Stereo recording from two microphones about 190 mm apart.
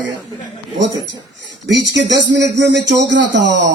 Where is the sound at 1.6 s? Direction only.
70° right (ahead or behind).